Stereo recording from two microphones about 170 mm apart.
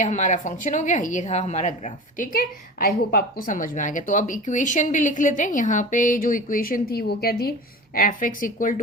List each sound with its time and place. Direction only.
0.0 s a woman's voice: 45° left (ahead or behind)